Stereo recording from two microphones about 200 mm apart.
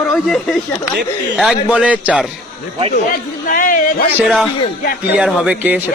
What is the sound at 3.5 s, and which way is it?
Speech, 45° left (ahead or behind).